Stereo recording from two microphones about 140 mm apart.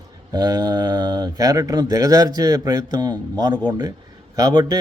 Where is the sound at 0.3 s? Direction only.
25° right (ahead or behind).